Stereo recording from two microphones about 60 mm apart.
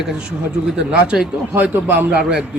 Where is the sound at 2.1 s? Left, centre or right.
Centre.